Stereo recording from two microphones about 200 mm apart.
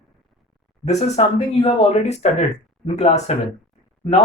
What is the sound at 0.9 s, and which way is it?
Speech, 35° left (ahead or behind).